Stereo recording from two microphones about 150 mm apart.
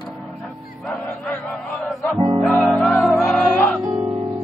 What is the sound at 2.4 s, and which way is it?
Music, 10° left (ahead or behind).